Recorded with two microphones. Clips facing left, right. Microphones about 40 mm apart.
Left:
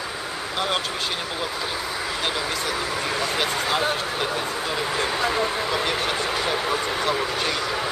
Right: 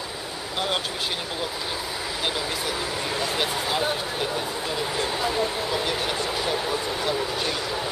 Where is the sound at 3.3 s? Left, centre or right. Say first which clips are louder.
Left 2 dB; centre.